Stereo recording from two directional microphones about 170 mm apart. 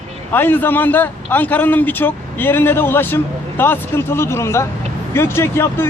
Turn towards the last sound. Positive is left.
turn(degrees=15)  # may be behind; listen again after turning